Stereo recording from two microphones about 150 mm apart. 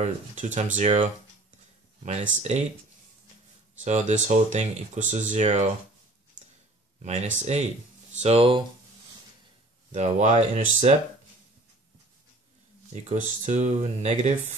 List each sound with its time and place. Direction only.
0.0 s speech: 55° right (ahead or behind)
3.8 s speech: 50° right (ahead or behind)
7.0 s speech: 50° right (ahead or behind)
9.9 s speech: 50° right (ahead or behind)
12.9 s speech: 50° right (ahead or behind)